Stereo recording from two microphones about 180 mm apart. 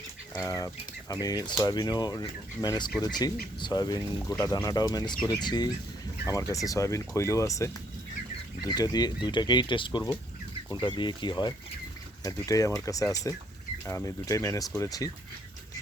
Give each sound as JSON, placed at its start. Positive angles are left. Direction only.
{"t": 0.3, "sound": "speech", "side_deg": 20}